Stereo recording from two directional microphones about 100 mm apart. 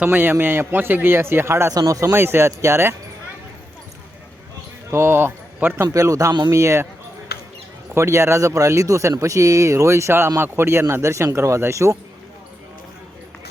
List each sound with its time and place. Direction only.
0.0 s speech: 20° right (ahead or behind)
1.7 s speech: 35° right (ahead or behind)
4.9 s speech: 25° right (ahead or behind)
7.9 s speech: 30° right (ahead or behind)